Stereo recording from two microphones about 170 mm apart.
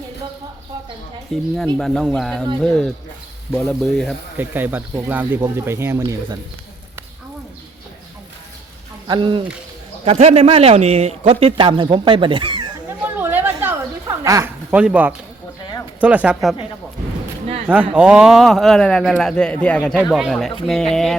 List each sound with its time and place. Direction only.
1.3 s speech: centre (ahead or behind)
4.4 s speech: 10° right (ahead or behind)
9.0 s a man's voice: 25° right (ahead or behind)
13.1 s a sound: 10° right (ahead or behind)
14.7 s speech: 10° right (ahead or behind)
17.7 s speech: 5° right (ahead or behind)